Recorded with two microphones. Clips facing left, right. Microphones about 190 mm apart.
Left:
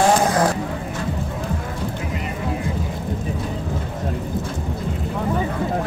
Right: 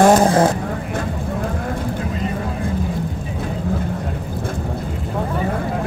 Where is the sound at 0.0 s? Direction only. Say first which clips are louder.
Right 5 dB; 40° right (ahead or behind).